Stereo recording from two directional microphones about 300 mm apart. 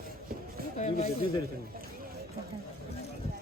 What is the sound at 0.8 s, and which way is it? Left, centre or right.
Speech, left.